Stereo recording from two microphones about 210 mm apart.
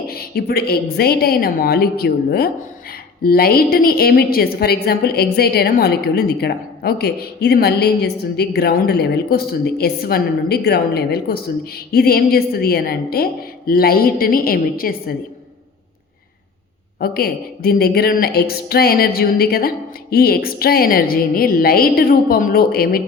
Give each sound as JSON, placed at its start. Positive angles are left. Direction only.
{"t": 0.1, "sound": "a woman's voice", "side_deg": 45}
{"t": 17.0, "sound": "a woman's voice", "side_deg": 45}